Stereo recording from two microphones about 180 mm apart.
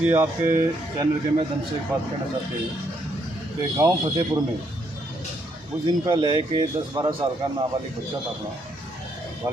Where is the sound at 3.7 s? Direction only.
20° right (ahead or behind).